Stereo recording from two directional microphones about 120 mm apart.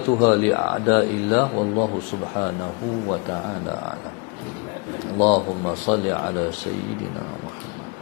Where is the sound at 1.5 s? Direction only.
30° left (ahead or behind).